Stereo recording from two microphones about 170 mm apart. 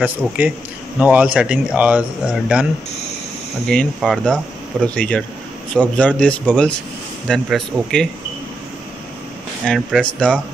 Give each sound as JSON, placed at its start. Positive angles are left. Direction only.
{"t": 0.9, "sound": "a man's voice", "side_deg": -10}
{"t": 3.6, "sound": "a man's voice", "side_deg": 0}
{"t": 9.7, "sound": "speech", "side_deg": 0}